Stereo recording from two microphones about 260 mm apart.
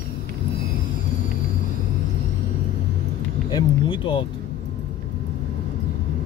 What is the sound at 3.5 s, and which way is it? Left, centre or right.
Speech, centre.